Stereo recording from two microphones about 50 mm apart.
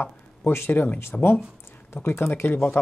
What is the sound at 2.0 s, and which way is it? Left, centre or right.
Speech, left.